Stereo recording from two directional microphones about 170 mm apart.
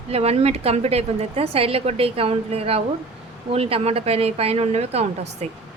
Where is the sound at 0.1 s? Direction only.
35° right (ahead or behind).